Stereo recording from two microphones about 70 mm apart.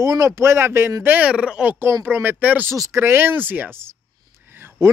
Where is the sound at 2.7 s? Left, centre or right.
Right.